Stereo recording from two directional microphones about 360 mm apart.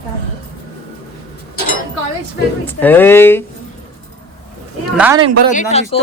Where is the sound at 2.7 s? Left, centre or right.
Centre.